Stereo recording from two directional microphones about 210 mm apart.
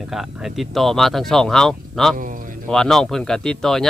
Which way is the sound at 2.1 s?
40° right (ahead or behind).